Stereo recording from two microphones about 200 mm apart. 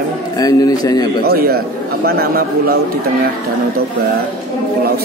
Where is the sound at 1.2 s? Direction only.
50° right (ahead or behind).